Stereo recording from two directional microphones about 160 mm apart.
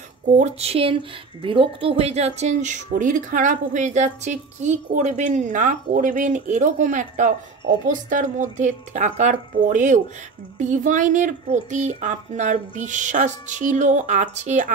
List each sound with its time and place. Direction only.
0.3 s speech: 40° right (ahead or behind)